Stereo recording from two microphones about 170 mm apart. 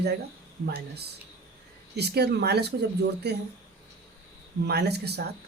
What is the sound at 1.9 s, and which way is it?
Speech, 75° right (ahead or behind).